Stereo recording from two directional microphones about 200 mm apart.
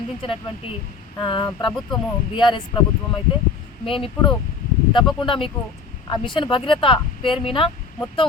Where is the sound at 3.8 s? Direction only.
25° left (ahead or behind).